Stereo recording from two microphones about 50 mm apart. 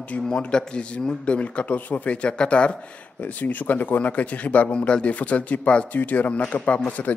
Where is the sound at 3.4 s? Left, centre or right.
Left.